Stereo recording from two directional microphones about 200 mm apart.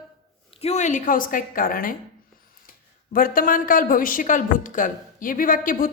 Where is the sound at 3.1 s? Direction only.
45° left (ahead or behind).